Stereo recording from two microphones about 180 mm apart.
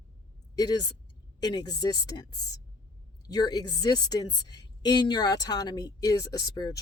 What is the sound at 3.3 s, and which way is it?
A woman's voice, 20° left (ahead or behind).